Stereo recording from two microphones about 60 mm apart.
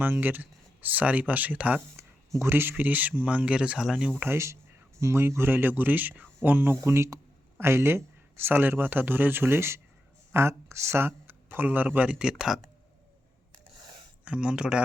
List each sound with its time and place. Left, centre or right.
0.0 s speech: right
2.4 s speech: right; by 3.8 s centre
3.8 s speech: centre
4.9 s speech: right
6.8 s speech: right
12.0 s speech: centre
14.3 s speech: centre